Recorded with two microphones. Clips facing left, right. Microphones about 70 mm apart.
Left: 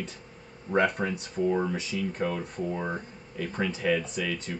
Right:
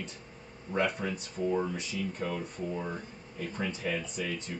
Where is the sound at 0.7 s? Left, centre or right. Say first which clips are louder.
Left 5 dB; left.